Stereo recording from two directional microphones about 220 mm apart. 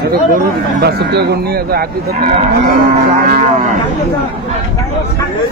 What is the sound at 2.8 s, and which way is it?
Cattle, 40° right (ahead or behind).